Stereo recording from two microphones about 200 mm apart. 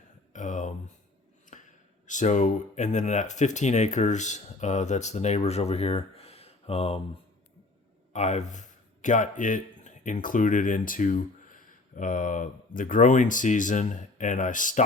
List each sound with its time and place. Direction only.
0.3 s a sound: 40° left (ahead or behind)
2.0 s speech: 35° left (ahead or behind)
8.1 s speech: 35° left (ahead or behind)